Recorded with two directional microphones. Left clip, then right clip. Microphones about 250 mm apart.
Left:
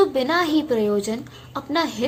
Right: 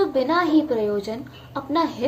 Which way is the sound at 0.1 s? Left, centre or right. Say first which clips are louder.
Right 1 dB; left.